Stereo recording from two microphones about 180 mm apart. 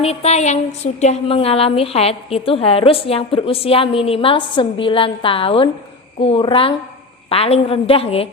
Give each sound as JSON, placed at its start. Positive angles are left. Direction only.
{"t": 0.0, "sound": "a woman's voice", "side_deg": 35}